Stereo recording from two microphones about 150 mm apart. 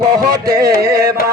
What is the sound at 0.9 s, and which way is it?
Speech, 90° right.